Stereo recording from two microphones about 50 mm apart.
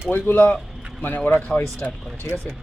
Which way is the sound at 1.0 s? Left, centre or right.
Left.